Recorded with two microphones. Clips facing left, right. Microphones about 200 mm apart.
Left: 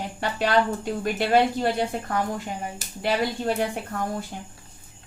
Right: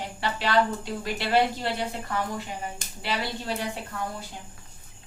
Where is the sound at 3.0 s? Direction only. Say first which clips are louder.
Left 7 dB; 50° left (ahead or behind).